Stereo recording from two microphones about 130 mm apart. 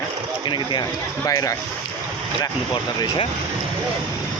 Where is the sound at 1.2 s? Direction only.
25° left (ahead or behind).